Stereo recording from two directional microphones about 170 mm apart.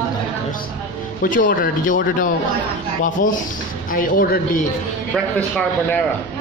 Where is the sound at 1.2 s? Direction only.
50° left (ahead or behind).